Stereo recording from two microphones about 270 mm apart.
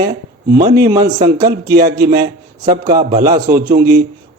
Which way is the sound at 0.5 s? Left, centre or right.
Right.